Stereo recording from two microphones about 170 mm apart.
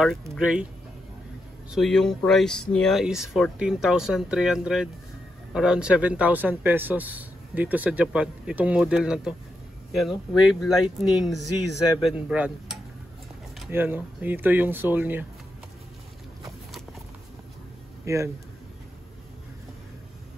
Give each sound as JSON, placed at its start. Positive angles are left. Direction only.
{"t": 0.3, "sound": "speech", "side_deg": -5}
{"t": 1.7, "sound": "speech", "side_deg": 0}
{"t": 18.0, "sound": "speech", "side_deg": -15}